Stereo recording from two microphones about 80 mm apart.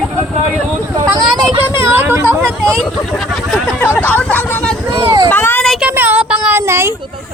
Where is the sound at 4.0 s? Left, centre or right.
Left.